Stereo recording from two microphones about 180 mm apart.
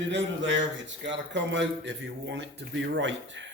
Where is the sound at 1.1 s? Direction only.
85° right.